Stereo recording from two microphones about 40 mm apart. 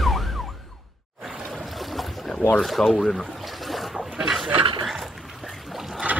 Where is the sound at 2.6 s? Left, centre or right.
Centre.